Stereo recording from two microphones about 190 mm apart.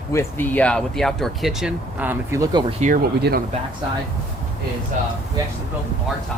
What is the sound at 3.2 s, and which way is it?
Speech, 55° right (ahead or behind).